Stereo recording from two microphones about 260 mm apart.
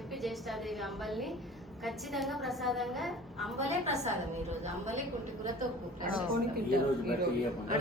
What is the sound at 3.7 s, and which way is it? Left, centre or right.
Speech, right.